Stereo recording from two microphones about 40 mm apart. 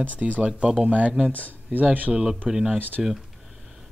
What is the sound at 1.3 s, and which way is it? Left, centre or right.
Speech, left.